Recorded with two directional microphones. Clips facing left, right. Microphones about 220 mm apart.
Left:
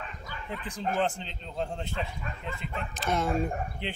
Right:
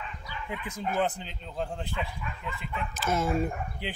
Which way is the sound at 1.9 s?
40° left (ahead or behind).